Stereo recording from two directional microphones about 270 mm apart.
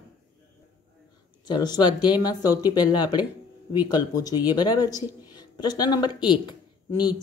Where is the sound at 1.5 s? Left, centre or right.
Centre.